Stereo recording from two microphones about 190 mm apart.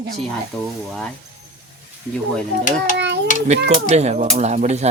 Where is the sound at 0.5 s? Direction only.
5° left (ahead or behind).